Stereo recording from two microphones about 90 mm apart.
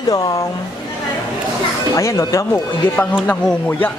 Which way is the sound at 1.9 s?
35° left (ahead or behind).